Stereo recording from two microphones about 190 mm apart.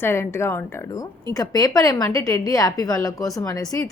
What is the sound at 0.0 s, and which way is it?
A woman's voice, 15° left (ahead or behind).